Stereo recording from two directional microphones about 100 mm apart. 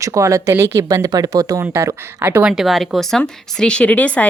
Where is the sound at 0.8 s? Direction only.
35° right (ahead or behind); by 2.5 s 20° right (ahead or behind).